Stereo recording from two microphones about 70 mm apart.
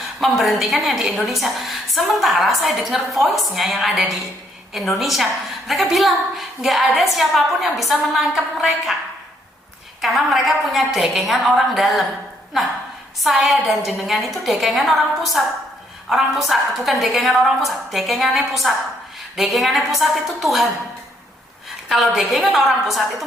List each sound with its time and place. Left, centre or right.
0.2 s a woman's voice: centre
10.0 s a woman's voice: centre
13.2 s a woman's voice: centre
21.8 s a woman's voice: centre